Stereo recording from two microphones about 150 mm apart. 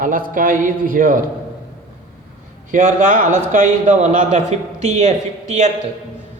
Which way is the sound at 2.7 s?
60° right (ahead or behind).